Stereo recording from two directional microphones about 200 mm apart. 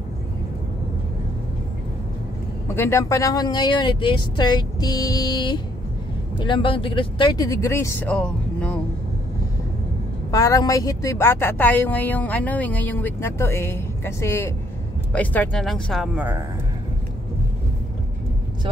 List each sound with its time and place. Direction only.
2.7 s speech: 10° left (ahead or behind)
10.3 s speech: 15° left (ahead or behind); by 16.4 s 10° right (ahead or behind)